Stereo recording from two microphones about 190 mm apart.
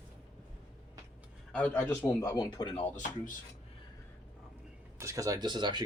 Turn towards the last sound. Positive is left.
turn(degrees=-25)  # may be behind; listen again after turning